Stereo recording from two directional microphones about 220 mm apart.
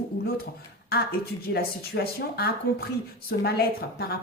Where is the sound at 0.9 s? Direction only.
45° left (ahead or behind).